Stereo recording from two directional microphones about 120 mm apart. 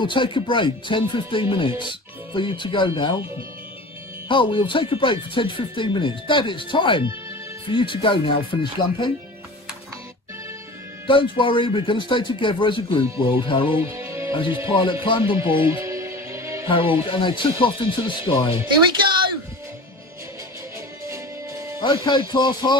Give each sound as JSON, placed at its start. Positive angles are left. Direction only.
{"t": 0.0, "sound": "speech", "side_deg": 45}
{"t": 4.3, "sound": "speech", "side_deg": 45}
{"t": 11.1, "sound": "speech", "side_deg": 45}
{"t": 13.9, "sound": "music", "side_deg": -20}
{"t": 14.7, "sound": "speech", "side_deg": 45}
{"t": 15.7, "sound": "music", "side_deg": -25}
{"t": 16.6, "sound": "speech", "side_deg": 45}
{"t": 21.1, "sound": "music", "side_deg": -25}
{"t": 21.8, "sound": "speech", "side_deg": 40}